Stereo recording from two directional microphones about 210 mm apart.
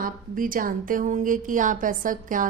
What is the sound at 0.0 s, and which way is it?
A woman's voice, 40° right (ahead or behind).